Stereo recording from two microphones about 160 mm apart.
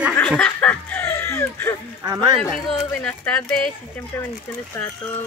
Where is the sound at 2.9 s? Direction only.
10° left (ahead or behind).